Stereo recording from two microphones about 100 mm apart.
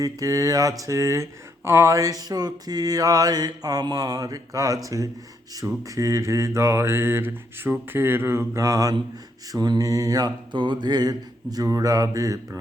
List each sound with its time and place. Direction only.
0.0 s speech: 35° right (ahead or behind)
5.5 s mantra: 35° right (ahead or behind)
9.5 s speech: 40° right (ahead or behind)